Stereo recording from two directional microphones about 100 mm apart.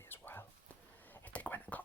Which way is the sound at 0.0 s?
20° left (ahead or behind).